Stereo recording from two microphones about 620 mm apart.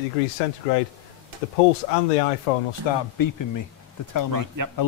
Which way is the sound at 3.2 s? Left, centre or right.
Left.